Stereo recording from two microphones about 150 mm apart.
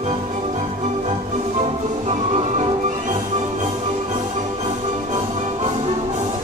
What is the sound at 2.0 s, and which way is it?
Music, 45° right (ahead or behind).